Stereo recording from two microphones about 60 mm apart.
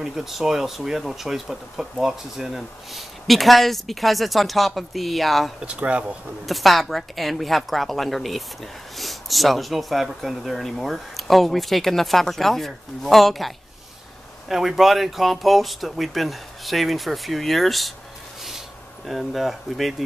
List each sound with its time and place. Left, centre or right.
0.0 s speech: centre
5.6 s speech: centre
6.4 s speech: centre
14.5 s speech: centre
19.0 s speech: centre